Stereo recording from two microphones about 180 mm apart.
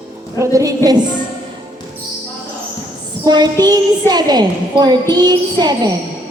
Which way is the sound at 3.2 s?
20° right (ahead or behind).